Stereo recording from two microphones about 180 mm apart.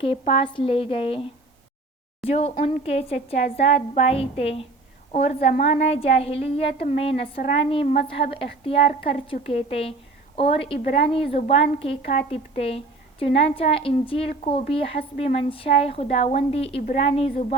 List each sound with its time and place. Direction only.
0.0 s a woman's voice: 30° left (ahead or behind)
2.2 s a woman's voice: 35° left (ahead or behind)